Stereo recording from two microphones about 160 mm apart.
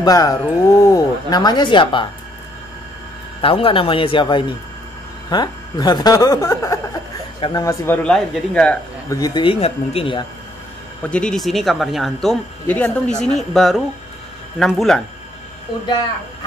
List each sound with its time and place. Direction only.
0.0 s speech: 20° left (ahead or behind)
3.3 s speech: 35° left (ahead or behind); by 6.8 s 20° left (ahead or behind)
7.3 s speech: 35° left (ahead or behind)
7.6 s speech: 15° left (ahead or behind)
9.1 s speech: 25° left (ahead or behind)
11.0 s speech: 5° left (ahead or behind)